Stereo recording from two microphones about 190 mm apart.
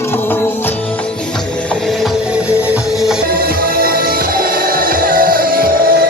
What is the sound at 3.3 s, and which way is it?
Music, 50° right (ahead or behind).